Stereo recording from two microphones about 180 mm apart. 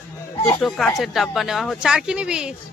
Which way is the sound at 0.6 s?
Centre (ahead or behind).